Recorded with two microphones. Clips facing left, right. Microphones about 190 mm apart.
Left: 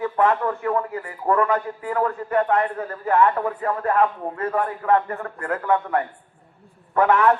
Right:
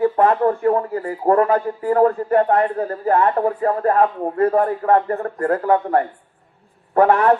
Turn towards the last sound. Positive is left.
turn(degrees=-35)  # may be behind; listen again after turning